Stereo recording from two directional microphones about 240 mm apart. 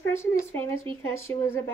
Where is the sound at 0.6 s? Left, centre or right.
Right.